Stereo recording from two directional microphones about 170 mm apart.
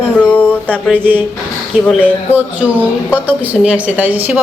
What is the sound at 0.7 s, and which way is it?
Speech, 10° right (ahead or behind).